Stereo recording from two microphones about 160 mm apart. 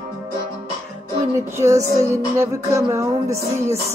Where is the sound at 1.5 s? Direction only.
20° right (ahead or behind).